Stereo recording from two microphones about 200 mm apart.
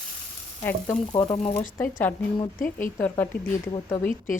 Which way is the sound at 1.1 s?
20° left (ahead or behind).